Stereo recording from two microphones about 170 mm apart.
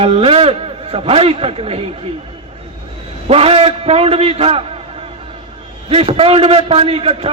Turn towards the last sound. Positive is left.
turn(degrees=-35)  # may be behind; listen again after turning